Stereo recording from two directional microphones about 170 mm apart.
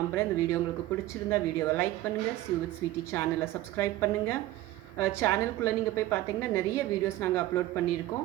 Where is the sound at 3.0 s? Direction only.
15° left (ahead or behind).